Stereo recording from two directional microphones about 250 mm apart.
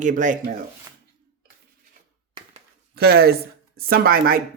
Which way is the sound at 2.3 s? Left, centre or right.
Right.